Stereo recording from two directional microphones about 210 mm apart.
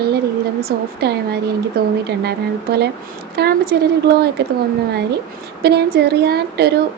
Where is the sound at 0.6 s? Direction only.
50° right (ahead or behind).